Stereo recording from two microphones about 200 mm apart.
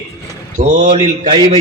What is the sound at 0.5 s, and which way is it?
Speech, 35° right (ahead or behind).